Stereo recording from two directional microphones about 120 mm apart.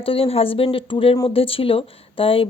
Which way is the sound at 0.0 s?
50° left (ahead or behind).